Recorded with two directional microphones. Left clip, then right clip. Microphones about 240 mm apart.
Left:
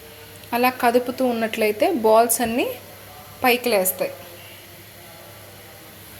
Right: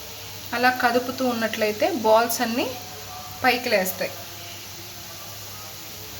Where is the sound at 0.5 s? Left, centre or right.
Left.